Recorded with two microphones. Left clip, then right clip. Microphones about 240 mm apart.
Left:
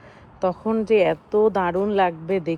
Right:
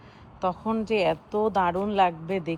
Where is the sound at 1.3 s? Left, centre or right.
Left.